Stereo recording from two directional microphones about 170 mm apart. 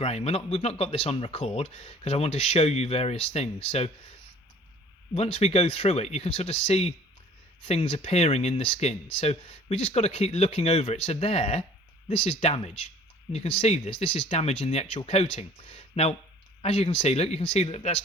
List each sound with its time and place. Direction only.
0.0 s speech: 35° left (ahead or behind)
5.1 s speech: 40° left (ahead or behind)